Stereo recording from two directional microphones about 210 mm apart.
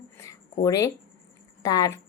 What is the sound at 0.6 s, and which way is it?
A woman's voice, 15° left (ahead or behind).